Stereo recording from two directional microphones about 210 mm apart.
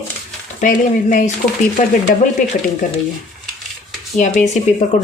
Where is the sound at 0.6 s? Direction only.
40° left (ahead or behind).